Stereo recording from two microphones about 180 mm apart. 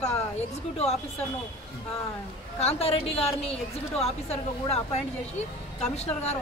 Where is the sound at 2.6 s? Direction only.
35° left (ahead or behind).